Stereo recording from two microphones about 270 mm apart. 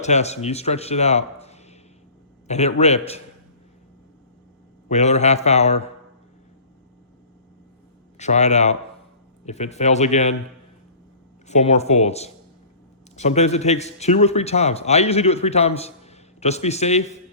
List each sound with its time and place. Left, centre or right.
0.0 s speech: left
4.9 s speech: left
8.2 s speech: left
11.4 s speech: left